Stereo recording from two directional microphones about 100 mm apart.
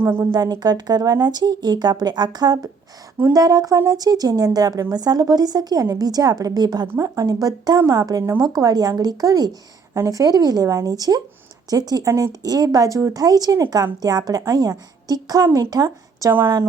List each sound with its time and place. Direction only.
0.0 s a woman's voice: 25° right (ahead or behind)
0.3 s a woman's voice: 40° right (ahead or behind)